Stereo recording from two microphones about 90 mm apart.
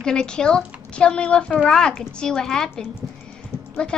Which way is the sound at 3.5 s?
25° left (ahead or behind).